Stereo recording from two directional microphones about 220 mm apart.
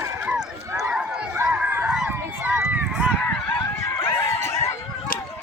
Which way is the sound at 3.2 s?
5° left (ahead or behind).